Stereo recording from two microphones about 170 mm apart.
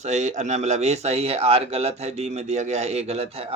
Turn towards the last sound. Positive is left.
turn(degrees=-40)  # may be behind; listen again after turning